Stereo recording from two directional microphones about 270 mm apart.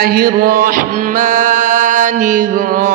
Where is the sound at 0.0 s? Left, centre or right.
Right.